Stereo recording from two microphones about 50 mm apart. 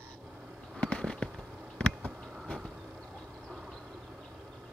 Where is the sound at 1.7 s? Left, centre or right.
Centre.